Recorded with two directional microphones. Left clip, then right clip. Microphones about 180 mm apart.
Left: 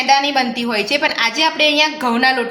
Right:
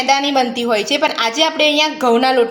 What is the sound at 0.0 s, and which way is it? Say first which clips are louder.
A woman's voice: even; 45° right (ahead or behind).